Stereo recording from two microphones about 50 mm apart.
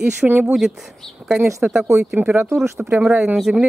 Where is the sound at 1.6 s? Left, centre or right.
Right.